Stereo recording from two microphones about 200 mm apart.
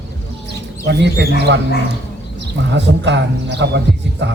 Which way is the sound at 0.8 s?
60° right (ahead or behind).